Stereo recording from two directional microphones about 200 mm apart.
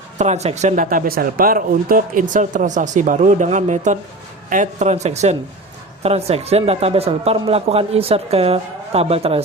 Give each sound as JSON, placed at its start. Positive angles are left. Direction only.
{"t": 0.2, "sound": "speech", "side_deg": -35}